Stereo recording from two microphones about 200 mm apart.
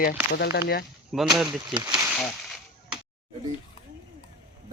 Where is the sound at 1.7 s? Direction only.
20° right (ahead or behind).